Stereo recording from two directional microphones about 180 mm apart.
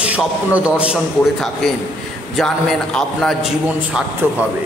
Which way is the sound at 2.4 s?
5° left (ahead or behind).